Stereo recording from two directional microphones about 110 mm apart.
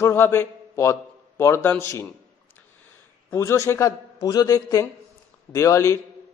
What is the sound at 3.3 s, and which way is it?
A man's voice, 25° left (ahead or behind).